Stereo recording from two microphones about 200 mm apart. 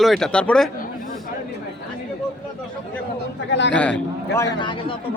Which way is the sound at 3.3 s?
60° left (ahead or behind).